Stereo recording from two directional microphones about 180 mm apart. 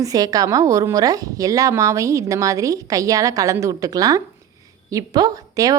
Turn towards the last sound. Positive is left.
turn(degrees=-20)  # may be behind; listen again after turning